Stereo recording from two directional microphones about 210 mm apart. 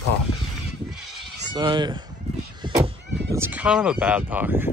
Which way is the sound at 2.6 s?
25° right (ahead or behind).